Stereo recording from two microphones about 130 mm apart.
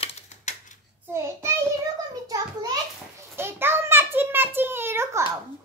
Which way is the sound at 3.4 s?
20° right (ahead or behind).